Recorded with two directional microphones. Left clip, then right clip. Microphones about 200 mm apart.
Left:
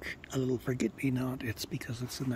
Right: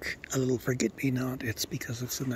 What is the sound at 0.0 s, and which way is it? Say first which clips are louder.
Speech: right 4 dB; centre (ahead or behind).